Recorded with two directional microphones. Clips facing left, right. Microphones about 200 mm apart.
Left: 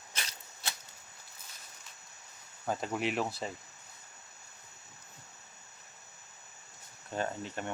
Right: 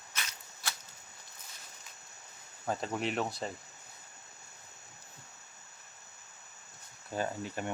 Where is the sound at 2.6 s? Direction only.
Centre (ahead or behind).